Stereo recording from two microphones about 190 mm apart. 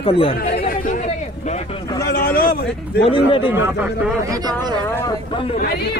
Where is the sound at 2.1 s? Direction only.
50° left (ahead or behind).